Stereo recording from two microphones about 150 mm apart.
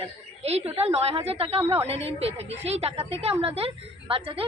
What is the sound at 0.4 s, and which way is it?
A woman's voice, 45° right (ahead or behind).